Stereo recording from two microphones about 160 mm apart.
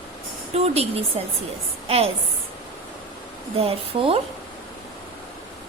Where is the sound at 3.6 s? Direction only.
35° right (ahead or behind).